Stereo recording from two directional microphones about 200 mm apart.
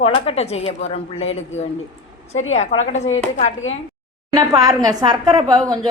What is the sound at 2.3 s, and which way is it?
Speech, 80° left.